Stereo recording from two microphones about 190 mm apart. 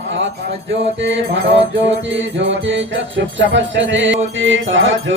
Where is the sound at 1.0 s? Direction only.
70° right (ahead or behind).